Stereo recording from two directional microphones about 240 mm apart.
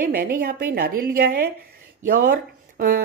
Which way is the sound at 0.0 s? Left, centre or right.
Right.